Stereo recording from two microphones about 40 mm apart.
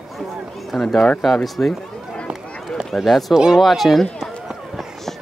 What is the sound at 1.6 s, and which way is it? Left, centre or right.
Speech, left.